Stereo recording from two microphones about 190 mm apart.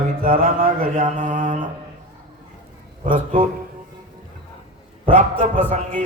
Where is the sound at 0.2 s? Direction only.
45° right (ahead or behind).